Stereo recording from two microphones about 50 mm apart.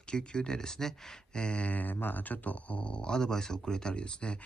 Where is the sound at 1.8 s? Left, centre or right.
Left.